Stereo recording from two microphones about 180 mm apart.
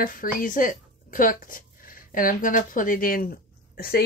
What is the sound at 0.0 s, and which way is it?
A woman's voice, 50° left (ahead or behind).